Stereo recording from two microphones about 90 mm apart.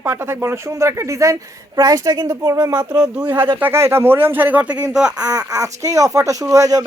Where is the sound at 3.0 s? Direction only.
15° right (ahead or behind).